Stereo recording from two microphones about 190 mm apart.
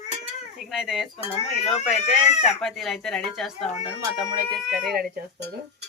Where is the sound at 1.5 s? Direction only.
35° left (ahead or behind).